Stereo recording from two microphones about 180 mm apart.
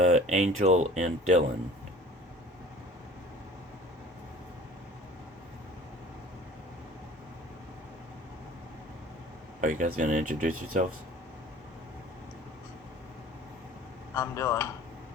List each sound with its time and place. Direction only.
0.0 s speech: 40° right (ahead or behind)
9.6 s speech: 45° right (ahead or behind)
14.1 s speech: 15° left (ahead or behind)